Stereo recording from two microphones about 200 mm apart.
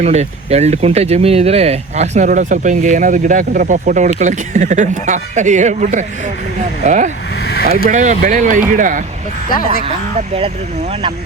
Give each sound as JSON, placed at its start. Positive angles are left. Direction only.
{"t": 0.0, "sound": "speech", "side_deg": -35}
{"t": 7.4, "sound": "speech", "side_deg": 50}
{"t": 7.9, "sound": "speech", "side_deg": -35}
{"t": 9.8, "sound": "speech", "side_deg": -30}